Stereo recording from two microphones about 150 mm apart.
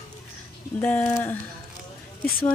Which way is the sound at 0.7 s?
10° left (ahead or behind).